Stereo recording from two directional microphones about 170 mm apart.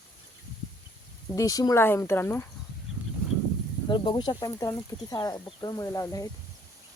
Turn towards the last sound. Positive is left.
turn(degrees=20)  # may be behind; listen again after turning